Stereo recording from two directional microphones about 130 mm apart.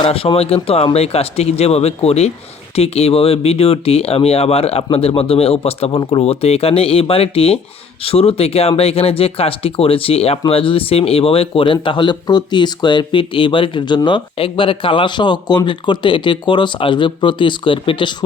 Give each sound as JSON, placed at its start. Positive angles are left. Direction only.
{"t": 0.0, "sound": "speech", "side_deg": 45}